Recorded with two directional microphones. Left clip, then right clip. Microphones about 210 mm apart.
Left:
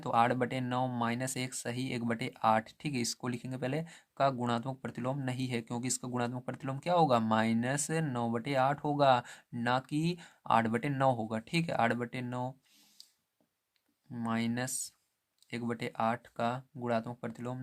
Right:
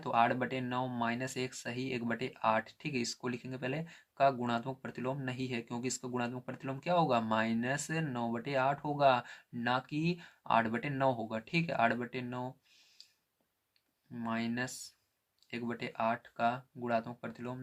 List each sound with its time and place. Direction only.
0.0 s speech: 45° left (ahead or behind)
13.0 s a sound: 45° left (ahead or behind)
14.1 s speech: 45° left (ahead or behind)